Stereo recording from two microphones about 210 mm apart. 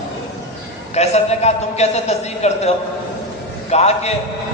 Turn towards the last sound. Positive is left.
turn(degrees=30)  # may be behind; listen again after turning